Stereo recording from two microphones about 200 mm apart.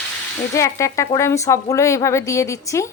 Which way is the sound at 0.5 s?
15° left (ahead or behind).